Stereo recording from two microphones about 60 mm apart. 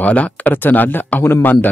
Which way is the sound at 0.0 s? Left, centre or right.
Left.